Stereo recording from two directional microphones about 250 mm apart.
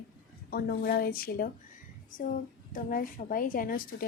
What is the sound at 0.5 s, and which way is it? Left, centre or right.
A woman's voice, left.